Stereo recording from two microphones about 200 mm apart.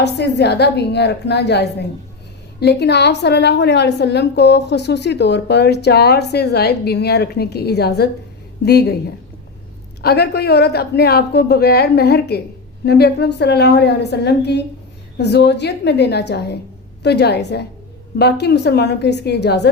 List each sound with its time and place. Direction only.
0.0 s a woman's voice: 55° left (ahead or behind)